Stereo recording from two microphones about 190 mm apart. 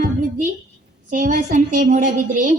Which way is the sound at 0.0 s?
45° right (ahead or behind).